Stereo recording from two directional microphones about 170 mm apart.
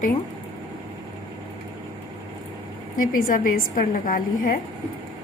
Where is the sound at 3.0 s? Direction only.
55° left (ahead or behind).